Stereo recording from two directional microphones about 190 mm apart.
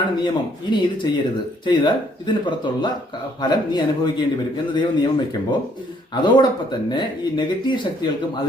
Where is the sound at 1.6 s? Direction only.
25° left (ahead or behind).